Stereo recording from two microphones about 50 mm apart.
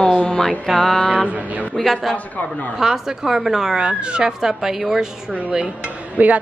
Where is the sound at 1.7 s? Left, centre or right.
Centre.